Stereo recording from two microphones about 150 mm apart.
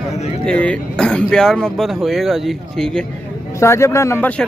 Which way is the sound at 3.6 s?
20° left (ahead or behind).